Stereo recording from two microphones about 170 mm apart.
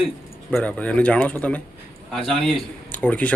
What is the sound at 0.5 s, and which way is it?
A man's voice, 10° left (ahead or behind).